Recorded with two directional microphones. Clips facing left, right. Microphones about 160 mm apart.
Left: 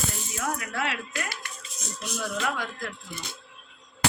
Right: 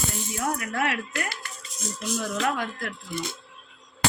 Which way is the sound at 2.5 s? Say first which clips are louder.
Right 3 dB; 60° right (ahead or behind).